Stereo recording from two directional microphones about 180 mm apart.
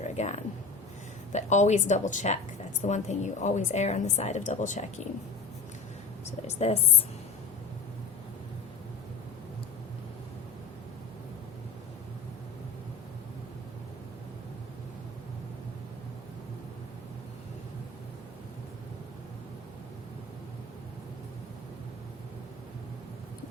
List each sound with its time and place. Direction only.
0.0 s a sound: 40° left (ahead or behind)
1.3 s a woman's voice: 40° left (ahead or behind)
6.5 s a woman's voice: 35° left (ahead or behind)